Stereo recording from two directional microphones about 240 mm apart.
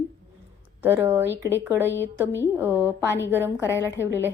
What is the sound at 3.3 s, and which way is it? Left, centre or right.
Speech, centre.